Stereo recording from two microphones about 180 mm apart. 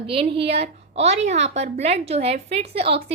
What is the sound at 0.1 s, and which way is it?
A woman's voice, 30° right (ahead or behind).